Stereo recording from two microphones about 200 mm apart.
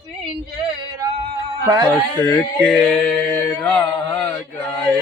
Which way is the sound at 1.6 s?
15° right (ahead or behind).